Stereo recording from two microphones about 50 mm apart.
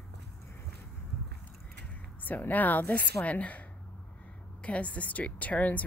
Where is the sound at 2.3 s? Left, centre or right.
Left.